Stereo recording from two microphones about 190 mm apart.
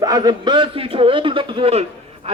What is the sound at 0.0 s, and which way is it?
A man's voice, 20° right (ahead or behind).